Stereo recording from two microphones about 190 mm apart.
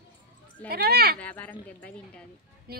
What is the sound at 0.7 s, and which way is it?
Speech, 55° right (ahead or behind).